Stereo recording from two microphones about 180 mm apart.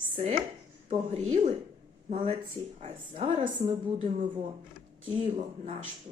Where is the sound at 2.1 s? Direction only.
30° right (ahead or behind).